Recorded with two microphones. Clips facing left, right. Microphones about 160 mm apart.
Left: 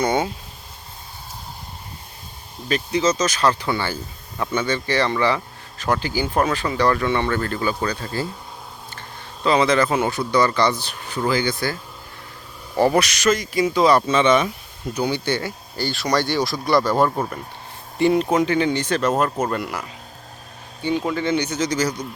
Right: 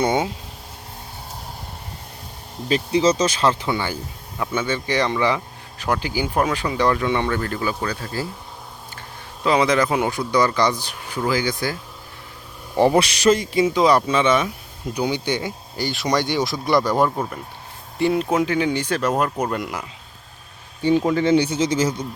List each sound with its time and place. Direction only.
0.0 s speech: 20° right (ahead or behind)
2.6 s a man's voice: 30° right (ahead or behind); by 11.8 s 10° right (ahead or behind)
12.7 s a man's voice: 20° right (ahead or behind)
17.1 s speech: centre (ahead or behind)
21.0 s a man's voice: 30° right (ahead or behind)